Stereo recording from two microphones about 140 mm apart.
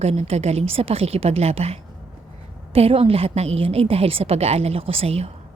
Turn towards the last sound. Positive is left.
turn(degrees=-45)  # may be behind; listen again after turning